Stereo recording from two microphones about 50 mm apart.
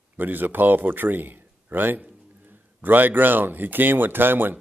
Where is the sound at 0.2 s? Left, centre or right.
Right.